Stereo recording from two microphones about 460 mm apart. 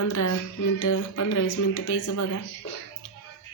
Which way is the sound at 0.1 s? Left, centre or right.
Left.